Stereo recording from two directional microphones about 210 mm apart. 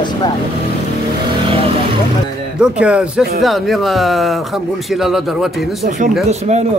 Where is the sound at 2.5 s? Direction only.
5° right (ahead or behind).